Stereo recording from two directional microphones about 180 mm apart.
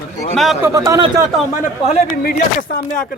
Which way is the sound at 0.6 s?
20° right (ahead or behind).